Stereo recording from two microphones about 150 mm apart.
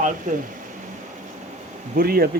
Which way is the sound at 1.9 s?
80° right.